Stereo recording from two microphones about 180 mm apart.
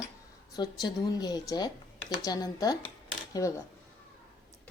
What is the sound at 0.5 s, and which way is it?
Speech, 20° left (ahead or behind).